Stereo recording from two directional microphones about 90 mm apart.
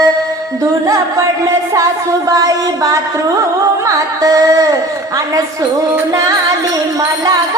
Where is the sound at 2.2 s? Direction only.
40° right (ahead or behind).